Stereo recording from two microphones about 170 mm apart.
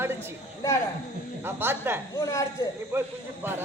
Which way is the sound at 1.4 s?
15° right (ahead or behind).